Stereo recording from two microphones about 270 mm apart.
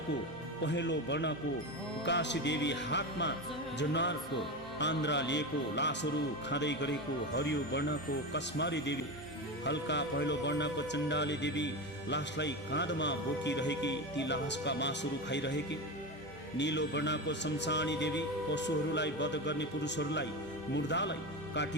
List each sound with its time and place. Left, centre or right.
0.6 s speech: left